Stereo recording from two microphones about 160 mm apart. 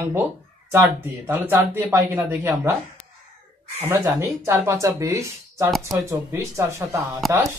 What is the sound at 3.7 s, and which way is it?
Speech, 15° right (ahead or behind).